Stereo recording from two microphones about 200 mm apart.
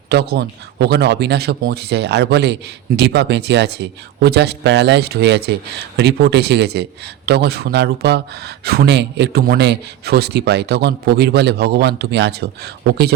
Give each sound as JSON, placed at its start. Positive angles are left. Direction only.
{"t": 0.1, "sound": "a man's voice", "side_deg": -55}